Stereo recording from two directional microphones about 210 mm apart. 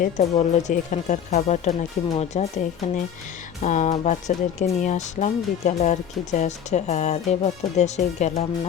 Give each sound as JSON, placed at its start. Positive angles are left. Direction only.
{"t": 0.0, "sound": "speech", "side_deg": 30}